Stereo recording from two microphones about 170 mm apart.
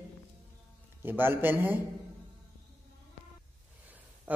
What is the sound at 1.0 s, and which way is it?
Speech, 10° right (ahead or behind).